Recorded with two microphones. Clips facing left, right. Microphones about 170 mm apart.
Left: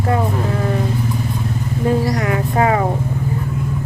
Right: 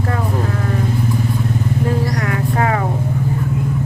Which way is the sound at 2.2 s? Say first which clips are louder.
Left 2 dB; 20° left (ahead or behind).